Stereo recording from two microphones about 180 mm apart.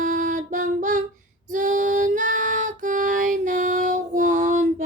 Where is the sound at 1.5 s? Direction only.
45° right (ahead or behind).